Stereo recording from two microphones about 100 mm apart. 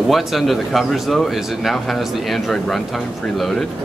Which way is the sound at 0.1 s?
Centre (ahead or behind).